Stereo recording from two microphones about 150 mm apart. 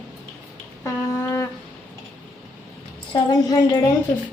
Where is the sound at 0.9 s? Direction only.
20° left (ahead or behind).